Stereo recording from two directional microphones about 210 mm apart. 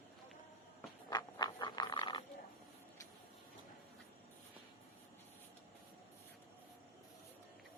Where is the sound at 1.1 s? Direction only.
20° left (ahead or behind).